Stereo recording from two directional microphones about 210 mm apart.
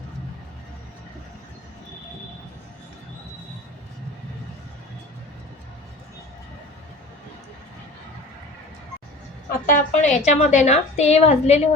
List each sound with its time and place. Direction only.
9.6 s a woman's voice: 40° left (ahead or behind)